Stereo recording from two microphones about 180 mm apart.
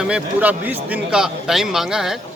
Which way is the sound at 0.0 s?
5° right (ahead or behind).